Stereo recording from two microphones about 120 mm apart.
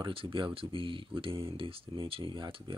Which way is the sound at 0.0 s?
45° right (ahead or behind).